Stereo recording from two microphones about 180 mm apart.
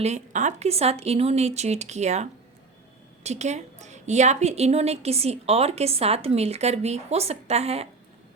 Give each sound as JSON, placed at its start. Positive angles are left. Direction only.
{"t": 0.0, "sound": "a woman's voice", "side_deg": -40}
{"t": 3.2, "sound": "a woman's voice", "side_deg": -40}